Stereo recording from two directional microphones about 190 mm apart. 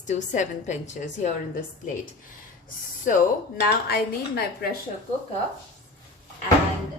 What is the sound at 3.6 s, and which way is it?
A woman's voice, 55° left (ahead or behind).